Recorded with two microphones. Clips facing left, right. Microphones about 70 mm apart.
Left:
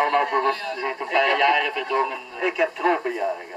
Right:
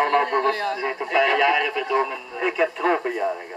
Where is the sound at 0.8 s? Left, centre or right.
Centre.